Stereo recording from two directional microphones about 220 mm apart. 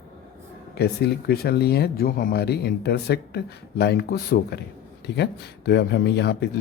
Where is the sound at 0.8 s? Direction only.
45° left (ahead or behind).